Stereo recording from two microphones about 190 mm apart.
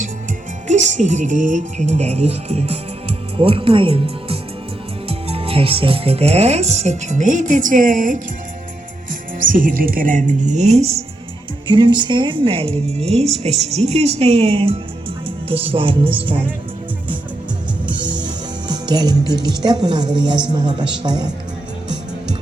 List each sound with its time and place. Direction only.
0.7 s speech: 40° right (ahead or behind)
9.4 s speech: 45° right (ahead or behind); by 16.4 s 25° right (ahead or behind)
17.8 s music: 25° right (ahead or behind)
18.7 s speech: 20° right (ahead or behind)